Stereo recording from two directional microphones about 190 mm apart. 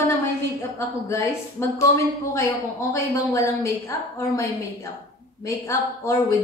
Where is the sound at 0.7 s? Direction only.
15° left (ahead or behind).